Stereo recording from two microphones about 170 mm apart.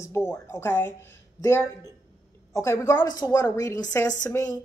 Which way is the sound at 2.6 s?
15° left (ahead or behind).